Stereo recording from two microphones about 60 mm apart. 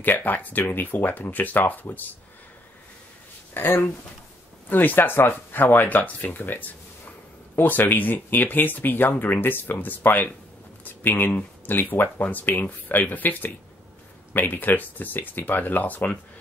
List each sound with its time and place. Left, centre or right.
0.0 s speech: left
3.5 s speech: left